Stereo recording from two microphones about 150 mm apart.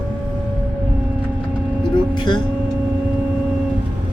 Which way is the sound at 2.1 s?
30° left (ahead or behind).